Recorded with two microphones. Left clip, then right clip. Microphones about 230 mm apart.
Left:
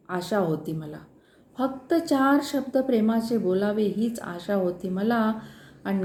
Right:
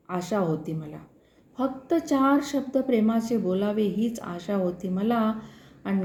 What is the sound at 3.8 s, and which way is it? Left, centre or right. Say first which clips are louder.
Speech: left 1 dB; right.